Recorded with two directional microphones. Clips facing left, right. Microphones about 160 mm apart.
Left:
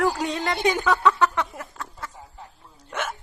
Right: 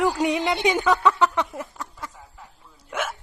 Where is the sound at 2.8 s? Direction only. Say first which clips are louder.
Right 1 dB; 5° right (ahead or behind).